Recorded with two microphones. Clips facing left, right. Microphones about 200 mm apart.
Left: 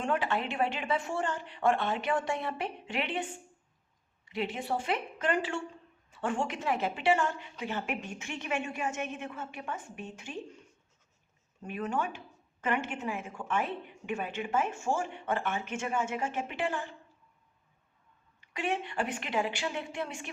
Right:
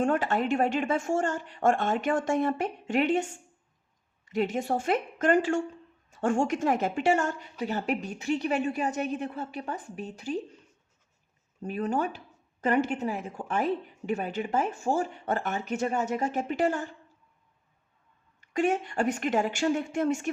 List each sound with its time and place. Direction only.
0.0 s speech: 45° right (ahead or behind)
4.3 s a woman's voice: 45° right (ahead or behind)
11.6 s a woman's voice: 35° right (ahead or behind)
18.3 s speech: 45° right (ahead or behind)